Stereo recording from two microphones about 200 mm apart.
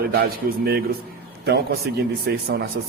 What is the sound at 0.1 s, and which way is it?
Speech, 50° right (ahead or behind).